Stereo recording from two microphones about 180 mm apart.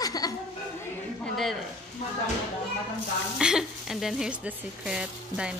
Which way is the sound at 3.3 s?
5° right (ahead or behind).